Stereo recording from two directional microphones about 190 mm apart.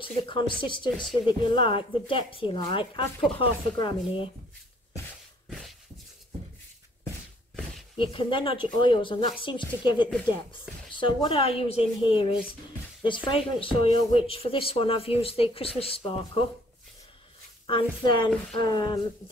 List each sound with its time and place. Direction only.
0.0 s speech: 25° left (ahead or behind)
0.8 s speech: centre (ahead or behind)
1.5 s speech: 25° left (ahead or behind)
8.0 s speech: 25° left (ahead or behind)
17.6 s speech: 25° left (ahead or behind)